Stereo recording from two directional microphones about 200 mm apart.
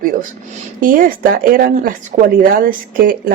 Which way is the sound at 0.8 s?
45° right (ahead or behind).